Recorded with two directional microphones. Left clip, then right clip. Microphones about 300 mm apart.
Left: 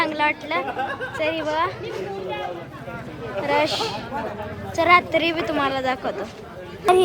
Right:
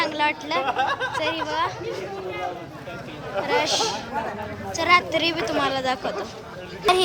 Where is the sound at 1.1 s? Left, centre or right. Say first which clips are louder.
Left 2 dB; centre.